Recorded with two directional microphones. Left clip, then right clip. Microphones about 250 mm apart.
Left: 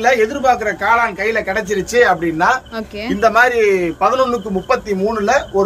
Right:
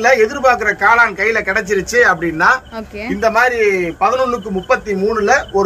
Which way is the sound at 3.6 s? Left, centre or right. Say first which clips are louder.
Even; centre.